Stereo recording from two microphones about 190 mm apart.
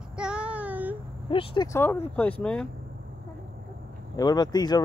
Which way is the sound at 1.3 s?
25° left (ahead or behind).